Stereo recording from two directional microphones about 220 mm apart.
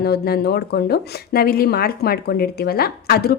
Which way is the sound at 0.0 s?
45° left (ahead or behind).